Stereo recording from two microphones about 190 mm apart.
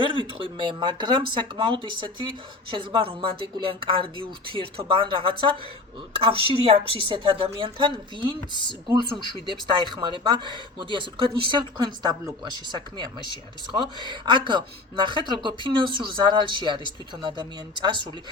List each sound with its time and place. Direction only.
0.0 s speech: 25° right (ahead or behind)